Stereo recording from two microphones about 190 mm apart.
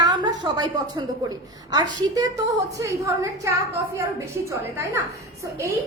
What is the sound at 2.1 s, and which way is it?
A woman's voice, 20° right (ahead or behind).